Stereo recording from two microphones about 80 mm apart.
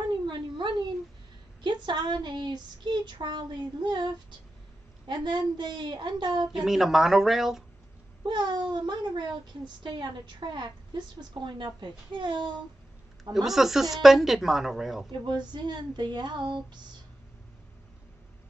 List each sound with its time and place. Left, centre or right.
0.3 s a sound: right
1.6 s child singing: right
6.5 s a woman's voice: centre
8.2 s child singing: right
13.2 s a woman's voice: centre
15.2 s child singing: right